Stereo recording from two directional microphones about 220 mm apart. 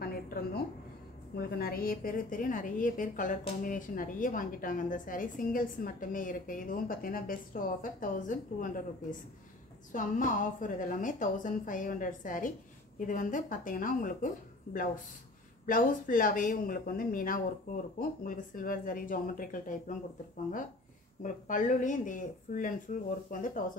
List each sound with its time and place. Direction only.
0.0 s a sound: 45° left (ahead or behind)
1.3 s a woman's voice: 45° left (ahead or behind)
9.9 s a woman's voice: 35° left (ahead or behind)
21.2 s a woman's voice: 35° left (ahead or behind)